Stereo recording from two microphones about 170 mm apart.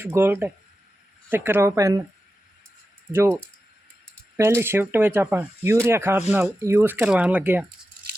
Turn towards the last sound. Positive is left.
turn(degrees=-10)  # may be behind; listen again after turning